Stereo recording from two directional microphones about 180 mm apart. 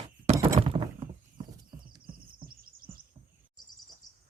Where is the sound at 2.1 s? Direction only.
55° right (ahead or behind).